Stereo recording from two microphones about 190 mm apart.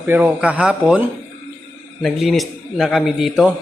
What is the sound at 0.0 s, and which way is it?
A man's voice, 10° right (ahead or behind).